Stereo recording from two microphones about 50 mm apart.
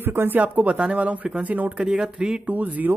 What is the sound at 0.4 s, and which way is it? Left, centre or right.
Speech, right.